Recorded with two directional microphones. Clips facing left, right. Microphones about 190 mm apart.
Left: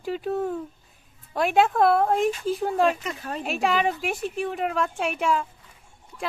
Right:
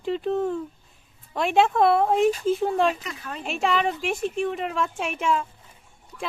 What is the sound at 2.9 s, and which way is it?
Speech, 40° left (ahead or behind).